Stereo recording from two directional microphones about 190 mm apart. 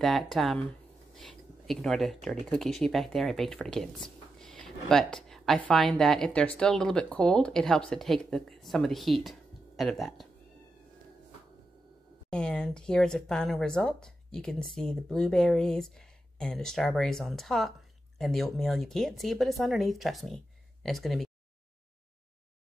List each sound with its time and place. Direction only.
0.0 s speech: centre (ahead or behind)
12.3 s speech: 5° left (ahead or behind)